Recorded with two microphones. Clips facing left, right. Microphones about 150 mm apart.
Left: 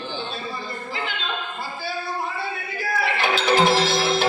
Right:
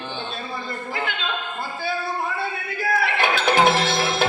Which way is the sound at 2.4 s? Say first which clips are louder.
Right 2 dB; 55° right (ahead or behind).